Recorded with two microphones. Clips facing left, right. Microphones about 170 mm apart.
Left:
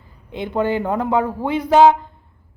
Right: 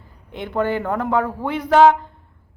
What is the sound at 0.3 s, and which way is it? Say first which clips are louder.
A man's voice: left 2 dB; 15° left (ahead or behind).